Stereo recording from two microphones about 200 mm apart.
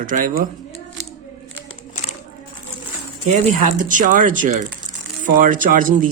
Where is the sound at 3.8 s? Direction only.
40° right (ahead or behind).